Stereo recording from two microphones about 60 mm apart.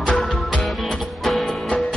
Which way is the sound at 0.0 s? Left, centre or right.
Centre.